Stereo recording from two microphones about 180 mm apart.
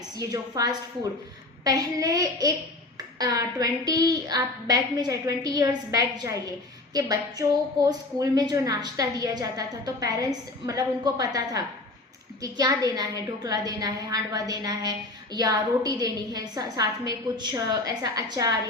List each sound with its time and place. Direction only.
0.2 s a woman's voice: 20° right (ahead or behind)